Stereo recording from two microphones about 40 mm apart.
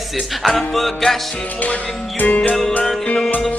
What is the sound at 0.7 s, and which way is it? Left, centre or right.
Music, centre.